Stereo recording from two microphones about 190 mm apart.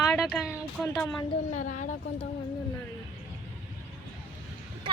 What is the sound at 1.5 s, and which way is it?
Speech, 40° left (ahead or behind).